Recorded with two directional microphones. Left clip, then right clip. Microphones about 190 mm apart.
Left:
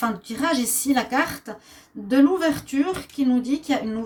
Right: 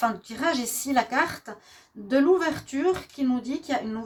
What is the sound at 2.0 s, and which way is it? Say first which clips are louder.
Speech: left 2 dB; 35° right (ahead or behind).